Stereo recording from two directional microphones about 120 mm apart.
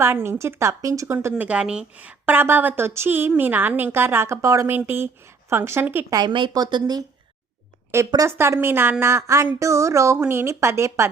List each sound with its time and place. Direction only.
0.0 s speech: 20° right (ahead or behind)
1.5 s a woman's voice: 10° right (ahead or behind)
6.1 s speech: 35° right (ahead or behind)
7.9 s speech: 20° right (ahead or behind)